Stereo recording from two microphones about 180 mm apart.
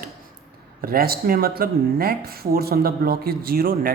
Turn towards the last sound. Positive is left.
turn(degrees=-50)  # may be behind; listen again after turning